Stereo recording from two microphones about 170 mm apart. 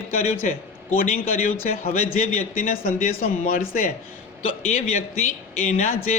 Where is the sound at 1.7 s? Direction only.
60° left (ahead or behind).